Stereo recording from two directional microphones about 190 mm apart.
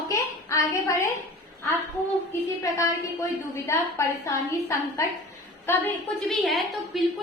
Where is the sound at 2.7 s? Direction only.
15° left (ahead or behind).